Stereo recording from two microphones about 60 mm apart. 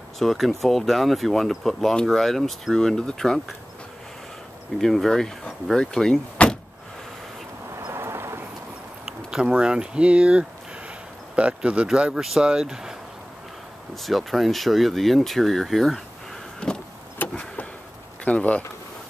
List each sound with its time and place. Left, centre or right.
0.2 s speech: centre
4.7 s speech: centre
7.9 s vehicle: right
9.0 s speech: centre
14.0 s speech: centre
16.6 s vehicle: centre
17.2 s vehicle: left
18.2 s speech: left